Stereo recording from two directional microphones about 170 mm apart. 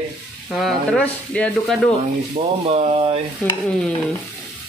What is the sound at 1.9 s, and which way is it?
Speech, 35° right (ahead or behind).